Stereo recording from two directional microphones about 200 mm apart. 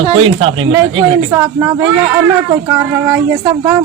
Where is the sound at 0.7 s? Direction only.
15° right (ahead or behind).